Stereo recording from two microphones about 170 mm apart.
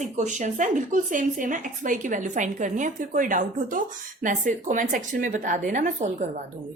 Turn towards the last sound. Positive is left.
turn(degrees=-45)  # may be behind; listen again after turning